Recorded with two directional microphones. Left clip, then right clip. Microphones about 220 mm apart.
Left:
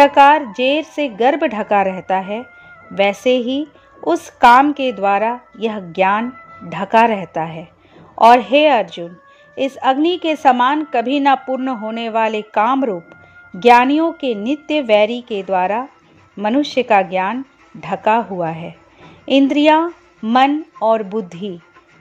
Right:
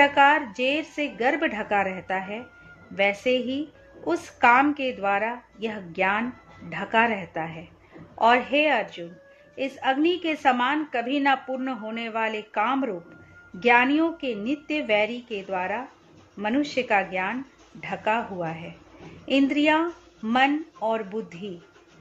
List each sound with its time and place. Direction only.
0.0 s a woman's voice: 30° left (ahead or behind)